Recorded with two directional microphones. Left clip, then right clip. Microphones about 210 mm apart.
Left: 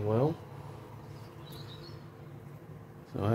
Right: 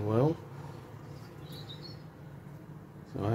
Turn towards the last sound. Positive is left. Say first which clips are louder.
# left 1 dB
turn(degrees=20)  # may be behind; listen again after turning